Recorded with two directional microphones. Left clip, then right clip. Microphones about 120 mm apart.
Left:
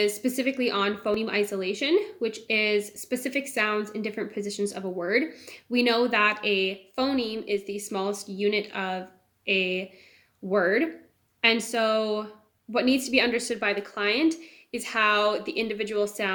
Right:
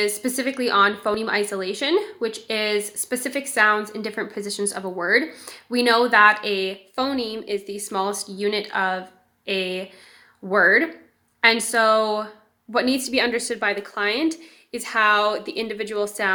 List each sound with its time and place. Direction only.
0.0 s a woman's voice: 25° left (ahead or behind)